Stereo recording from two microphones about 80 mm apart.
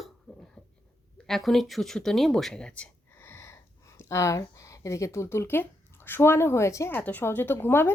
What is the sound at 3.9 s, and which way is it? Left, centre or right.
Speech, left.